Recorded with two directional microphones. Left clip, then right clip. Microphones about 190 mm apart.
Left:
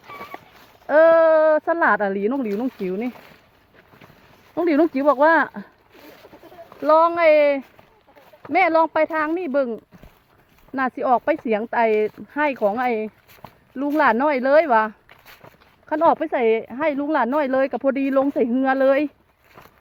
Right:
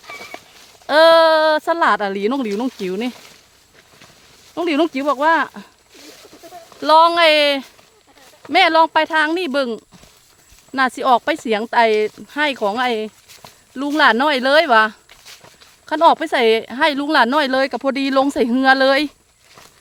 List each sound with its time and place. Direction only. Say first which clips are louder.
1.2 s a sound: right 2 dB; 20° right (ahead or behind)
1.6 s speech: right 2 dB; 10° right (ahead or behind)
2.3 s a woman's voice: right 3 dB; 30° right (ahead or behind)
4.5 s speech: right 1 dB; 5° right (ahead or behind)
6.8 s a woman's voice: right 4 dB; 20° right (ahead or behind)
10.8 s speech: right 5 dB; 15° right (ahead or behind)
15.1 s a sound: right 4 dB; 60° left (ahead or behind)
15.9 s speech: right 4 dB; 15° right (ahead or behind)
16.3 s a woman's voice: right 4 dB; 30° right (ahead or behind)
17.5 s speech: right 2 dB; 15° right (ahead or behind)
18.1 s a woman's voice: right 3 dB; 25° right (ahead or behind)